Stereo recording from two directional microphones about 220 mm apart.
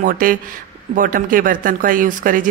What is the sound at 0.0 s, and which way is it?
A woman's voice, 40° right (ahead or behind).